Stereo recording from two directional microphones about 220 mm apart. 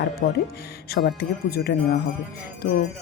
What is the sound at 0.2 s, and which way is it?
Speech, 40° left (ahead or behind).